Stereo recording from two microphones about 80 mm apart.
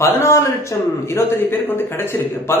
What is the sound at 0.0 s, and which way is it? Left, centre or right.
Speech, left.